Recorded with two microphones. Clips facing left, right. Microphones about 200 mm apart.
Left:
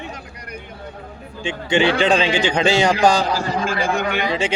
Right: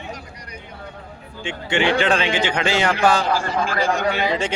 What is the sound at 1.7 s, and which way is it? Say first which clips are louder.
A man's voice: left 2 dB; 15° left (ahead or behind).